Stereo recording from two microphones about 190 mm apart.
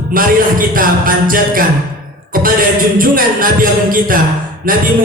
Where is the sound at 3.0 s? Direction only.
50° right (ahead or behind).